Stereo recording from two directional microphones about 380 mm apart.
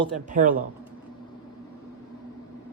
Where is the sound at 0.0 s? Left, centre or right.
Centre.